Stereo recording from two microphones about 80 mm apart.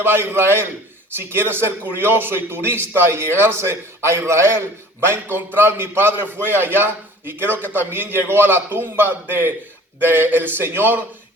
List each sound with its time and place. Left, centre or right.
0.0 s a man's voice: right